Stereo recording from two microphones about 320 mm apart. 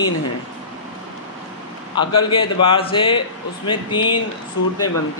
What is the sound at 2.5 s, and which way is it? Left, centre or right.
Speech, centre.